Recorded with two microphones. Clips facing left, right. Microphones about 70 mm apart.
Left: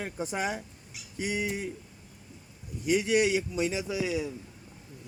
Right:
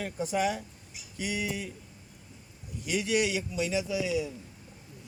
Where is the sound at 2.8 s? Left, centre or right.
Left.